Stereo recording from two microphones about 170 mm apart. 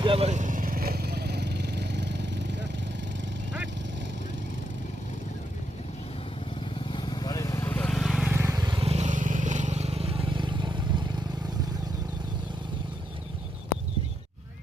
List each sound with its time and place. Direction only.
0.0 s vehicle: 35° right (ahead or behind); by 2.6 s 90° right
6.7 s vehicle: 30° left (ahead or behind); by 8.3 s centre (ahead or behind)
8.3 s vehicle: 15° right (ahead or behind)